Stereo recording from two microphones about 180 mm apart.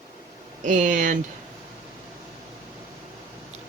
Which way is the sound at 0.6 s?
45° right (ahead or behind).